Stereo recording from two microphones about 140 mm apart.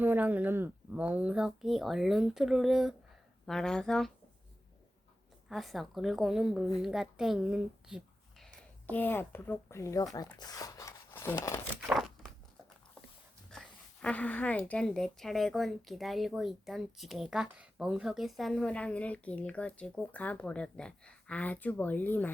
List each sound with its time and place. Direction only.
0.0 s speech: 10° right (ahead or behind); by 4.1 s 5° left (ahead or behind)
5.5 s a woman's voice: centre (ahead or behind)
8.9 s a woman's voice: 15° left (ahead or behind)
10.3 s a sound: 30° left (ahead or behind)
11.9 s crunch: centre (ahead or behind)
13.5 s a woman's voice: 5° left (ahead or behind)